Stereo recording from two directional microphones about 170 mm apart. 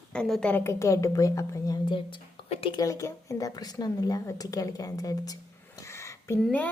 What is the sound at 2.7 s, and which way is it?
Speech, 20° left (ahead or behind).